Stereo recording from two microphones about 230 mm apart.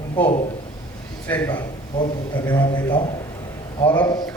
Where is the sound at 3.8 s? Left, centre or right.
Centre.